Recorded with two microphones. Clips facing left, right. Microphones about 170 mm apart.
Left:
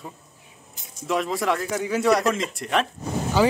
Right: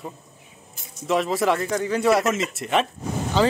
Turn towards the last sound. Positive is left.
turn(degrees=10)  # may be behind; listen again after turning